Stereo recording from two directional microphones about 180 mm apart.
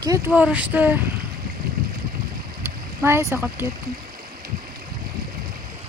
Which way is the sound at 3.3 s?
10° right (ahead or behind).